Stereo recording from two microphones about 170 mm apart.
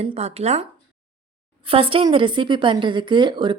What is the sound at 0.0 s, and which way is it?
Speech, 35° right (ahead or behind).